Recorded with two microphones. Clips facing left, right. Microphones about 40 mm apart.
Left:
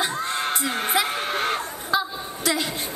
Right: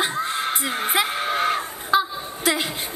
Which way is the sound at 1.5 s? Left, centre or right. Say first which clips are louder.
Right 3 dB; centre.